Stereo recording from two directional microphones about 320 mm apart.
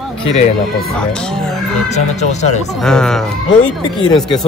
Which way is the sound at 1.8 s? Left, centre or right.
Left.